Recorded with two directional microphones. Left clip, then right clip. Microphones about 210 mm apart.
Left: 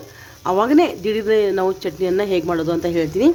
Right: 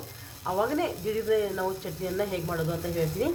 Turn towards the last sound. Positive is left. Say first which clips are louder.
# left 11 dB
turn(degrees=60)  # may be behind; listen again after turning